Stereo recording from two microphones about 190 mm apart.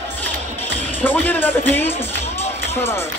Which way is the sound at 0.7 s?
10° left (ahead or behind).